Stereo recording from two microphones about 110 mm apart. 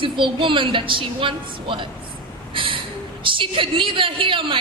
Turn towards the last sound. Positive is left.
turn(degrees=-50)  # may be behind; listen again after turning